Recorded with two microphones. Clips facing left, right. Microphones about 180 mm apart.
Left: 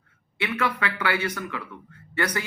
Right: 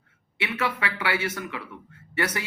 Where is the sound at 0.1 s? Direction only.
25° right (ahead or behind).